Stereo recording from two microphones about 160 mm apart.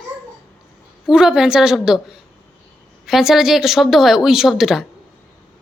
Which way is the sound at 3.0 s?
Centre (ahead or behind).